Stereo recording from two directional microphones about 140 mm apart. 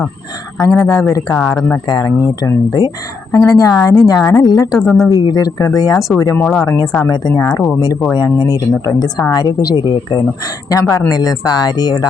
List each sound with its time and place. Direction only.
1.0 s a woman's voice: 20° left (ahead or behind)
1.9 s a woman's voice: 30° left (ahead or behind)
4.7 s speech: centre (ahead or behind)
5.0 s a woman's voice: 25° left (ahead or behind)
6.4 s speech: 5° left (ahead or behind)
6.7 s a woman's voice: 25° left (ahead or behind)